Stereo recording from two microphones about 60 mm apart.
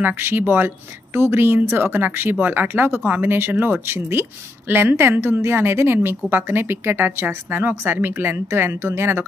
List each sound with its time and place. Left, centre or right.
0.0 s speech: right
3.5 s speech: right
3.8 s speech: right